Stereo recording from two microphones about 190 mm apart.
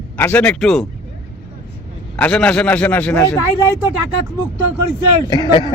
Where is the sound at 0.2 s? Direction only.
10° left (ahead or behind).